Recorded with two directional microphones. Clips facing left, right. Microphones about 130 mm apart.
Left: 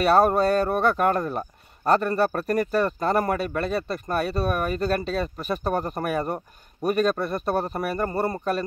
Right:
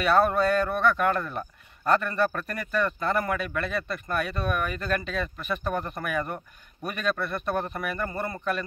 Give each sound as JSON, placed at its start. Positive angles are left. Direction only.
{"t": 0.0, "sound": "speech", "side_deg": 40}